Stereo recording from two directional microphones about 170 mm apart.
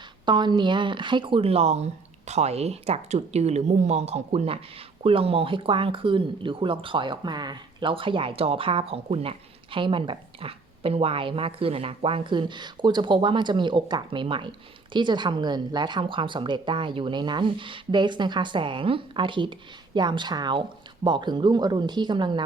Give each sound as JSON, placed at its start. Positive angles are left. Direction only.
{"t": 0.3, "sound": "a woman's voice", "side_deg": -25}